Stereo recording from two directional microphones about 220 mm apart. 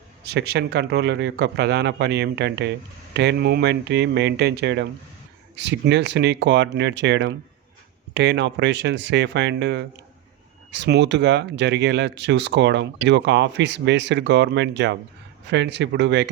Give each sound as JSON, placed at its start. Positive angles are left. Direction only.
{"t": 0.3, "sound": "speech", "side_deg": -50}